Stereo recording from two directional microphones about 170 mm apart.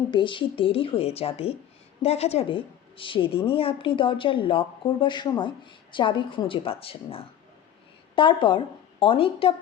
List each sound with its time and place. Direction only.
0.1 s a woman's voice: 30° left (ahead or behind)